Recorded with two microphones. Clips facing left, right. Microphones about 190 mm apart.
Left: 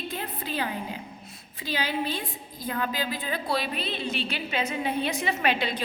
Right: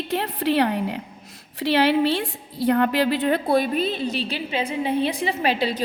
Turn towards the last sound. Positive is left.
turn(degrees=-35)  # may be behind; listen again after turning